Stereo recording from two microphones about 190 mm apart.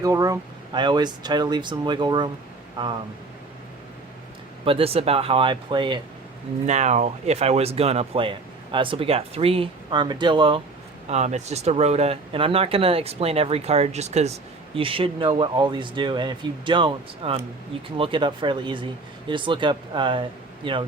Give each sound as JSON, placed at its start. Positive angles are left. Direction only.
{"t": 0.0, "sound": "speech", "side_deg": -15}
{"t": 4.6, "sound": "speech", "side_deg": -30}
{"t": 6.7, "sound": "speech", "side_deg": -40}
{"t": 11.1, "sound": "speech", "side_deg": -35}